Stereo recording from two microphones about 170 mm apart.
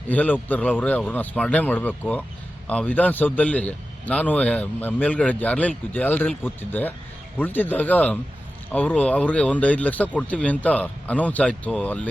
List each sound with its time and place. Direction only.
0.1 s a man's voice: 10° left (ahead or behind)